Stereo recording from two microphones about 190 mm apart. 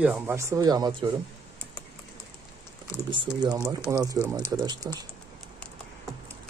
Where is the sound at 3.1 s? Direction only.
20° right (ahead or behind).